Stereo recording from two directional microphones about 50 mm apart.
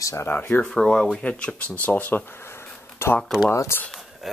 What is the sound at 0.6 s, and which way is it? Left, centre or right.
Speech, centre.